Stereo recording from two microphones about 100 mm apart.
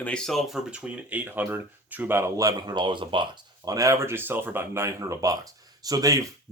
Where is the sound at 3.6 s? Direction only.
35° right (ahead or behind).